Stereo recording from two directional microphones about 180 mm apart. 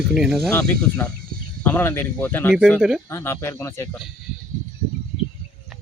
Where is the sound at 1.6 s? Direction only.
10° left (ahead or behind).